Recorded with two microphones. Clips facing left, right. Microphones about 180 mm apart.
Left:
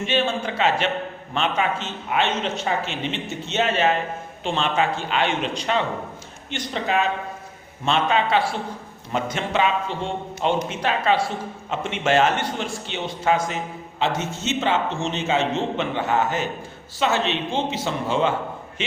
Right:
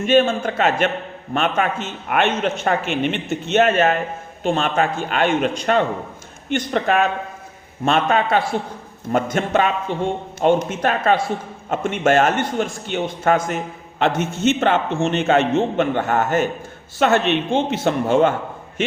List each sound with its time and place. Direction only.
0.0 s a man's voice: 45° right (ahead or behind)